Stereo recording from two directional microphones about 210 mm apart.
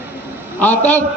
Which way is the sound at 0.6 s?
10° left (ahead or behind).